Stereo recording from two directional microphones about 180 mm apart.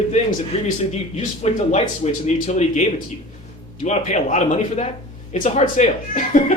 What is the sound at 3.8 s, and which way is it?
A man's voice, 40° left (ahead or behind).